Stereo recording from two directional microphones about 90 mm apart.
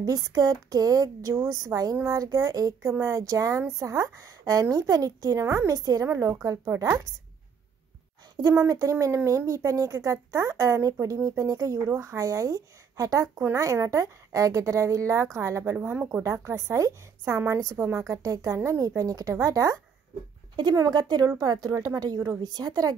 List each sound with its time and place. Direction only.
0.0 s speech: 40° right (ahead or behind)
8.5 s a woman's voice: 35° right (ahead or behind); by 16.2 s 20° right (ahead or behind)
16.2 s speech: 30° right (ahead or behind)